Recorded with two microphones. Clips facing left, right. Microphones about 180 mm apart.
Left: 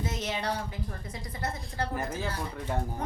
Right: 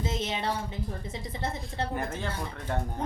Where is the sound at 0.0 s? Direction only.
25° right (ahead or behind).